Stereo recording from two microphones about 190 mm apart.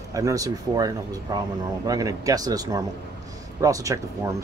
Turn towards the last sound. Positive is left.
turn(degrees=-15)  # may be behind; listen again after turning